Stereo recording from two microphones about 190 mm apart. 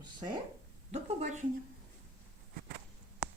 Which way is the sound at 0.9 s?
40° right (ahead or behind).